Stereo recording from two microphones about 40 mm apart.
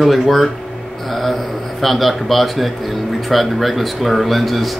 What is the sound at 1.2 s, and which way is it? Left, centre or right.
A man's voice, centre.